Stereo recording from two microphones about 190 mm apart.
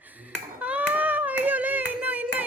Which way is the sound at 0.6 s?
10° right (ahead or behind).